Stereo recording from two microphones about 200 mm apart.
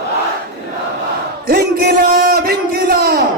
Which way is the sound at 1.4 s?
50° right (ahead or behind).